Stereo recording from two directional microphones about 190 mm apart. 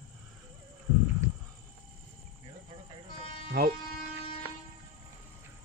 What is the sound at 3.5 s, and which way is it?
Speech, 55° right (ahead or behind).